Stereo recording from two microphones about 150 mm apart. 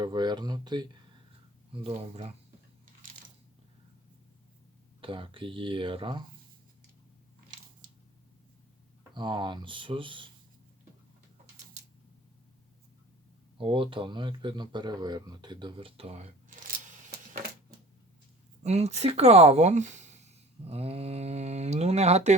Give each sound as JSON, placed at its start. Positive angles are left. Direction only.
{"t": 0.0, "sound": "speech", "side_deg": -30}
{"t": 4.9, "sound": "speech", "side_deg": -35}
{"t": 9.1, "sound": "speech", "side_deg": -30}
{"t": 13.6, "sound": "speech", "side_deg": -35}
{"t": 18.6, "sound": "speech", "side_deg": -45}